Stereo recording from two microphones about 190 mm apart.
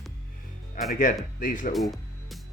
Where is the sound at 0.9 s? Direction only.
45° left (ahead or behind).